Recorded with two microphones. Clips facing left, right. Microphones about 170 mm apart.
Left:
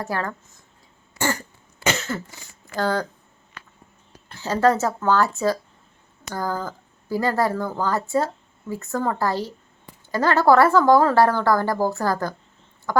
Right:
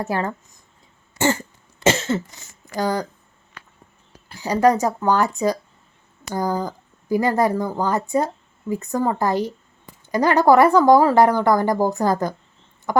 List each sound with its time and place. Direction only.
0.0 s speech: 20° right (ahead or behind)
1.2 s cough: 25° right (ahead or behind)
2.7 s speech: 15° right (ahead or behind)
4.3 s speech: 15° right (ahead or behind)
12.9 s chicken: 20° right (ahead or behind)